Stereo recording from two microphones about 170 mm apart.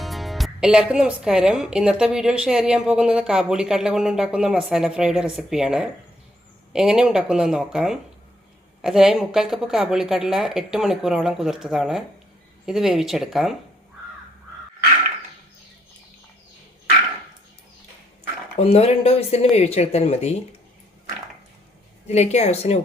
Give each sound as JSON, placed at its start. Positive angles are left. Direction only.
{"t": 0.0, "sound": "speech", "side_deg": 0}
{"t": 18.6, "sound": "speech", "side_deg": 35}
{"t": 22.0, "sound": "speech", "side_deg": 40}